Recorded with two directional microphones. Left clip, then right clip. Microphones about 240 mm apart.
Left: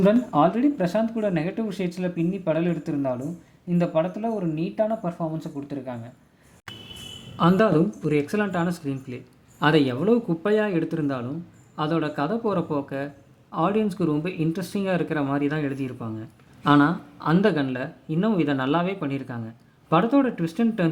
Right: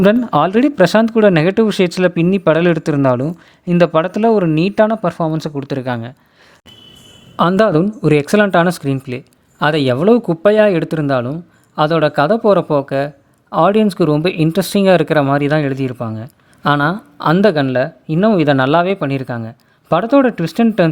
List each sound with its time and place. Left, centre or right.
0.0 s speech: right
7.3 s speech: right